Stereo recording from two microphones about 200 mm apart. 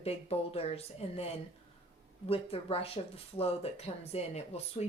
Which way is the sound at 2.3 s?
30° left (ahead or behind).